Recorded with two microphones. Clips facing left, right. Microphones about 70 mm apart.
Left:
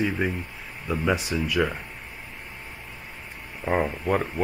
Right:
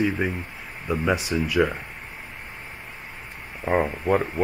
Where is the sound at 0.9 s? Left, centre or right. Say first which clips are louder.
Right 1 dB; centre.